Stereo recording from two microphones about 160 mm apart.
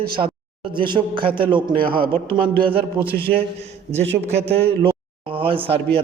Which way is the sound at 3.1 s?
75° right (ahead or behind).